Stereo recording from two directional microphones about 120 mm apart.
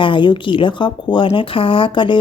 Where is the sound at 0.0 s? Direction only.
40° left (ahead or behind).